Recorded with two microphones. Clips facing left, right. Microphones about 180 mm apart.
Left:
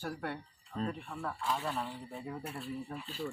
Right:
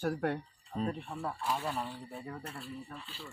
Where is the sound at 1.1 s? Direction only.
20° right (ahead or behind).